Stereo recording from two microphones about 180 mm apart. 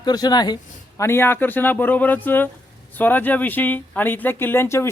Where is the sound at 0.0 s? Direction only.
25° left (ahead or behind).